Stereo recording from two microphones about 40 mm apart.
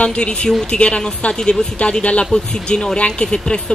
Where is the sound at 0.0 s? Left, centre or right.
Left.